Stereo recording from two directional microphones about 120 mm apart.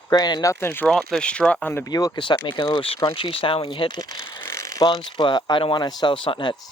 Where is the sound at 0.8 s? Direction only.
5° left (ahead or behind).